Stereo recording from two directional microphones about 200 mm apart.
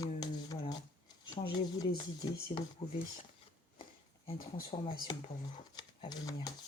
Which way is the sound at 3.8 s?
30° left (ahead or behind).